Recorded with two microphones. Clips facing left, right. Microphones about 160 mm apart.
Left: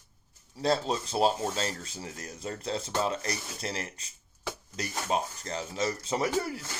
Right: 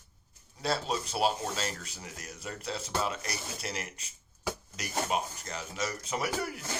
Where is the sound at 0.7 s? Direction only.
35° left (ahead or behind).